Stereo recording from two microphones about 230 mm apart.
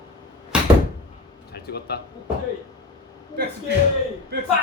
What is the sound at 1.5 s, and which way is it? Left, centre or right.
Speech, left.